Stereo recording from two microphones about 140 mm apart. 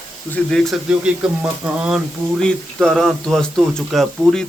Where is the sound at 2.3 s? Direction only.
5° left (ahead or behind).